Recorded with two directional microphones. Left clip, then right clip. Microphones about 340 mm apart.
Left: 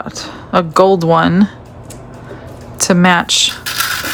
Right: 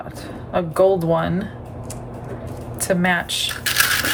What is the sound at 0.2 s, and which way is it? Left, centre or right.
Speech, centre.